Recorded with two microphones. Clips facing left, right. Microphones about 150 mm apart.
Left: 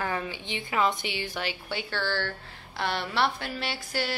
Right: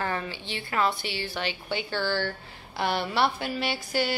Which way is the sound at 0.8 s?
15° left (ahead or behind).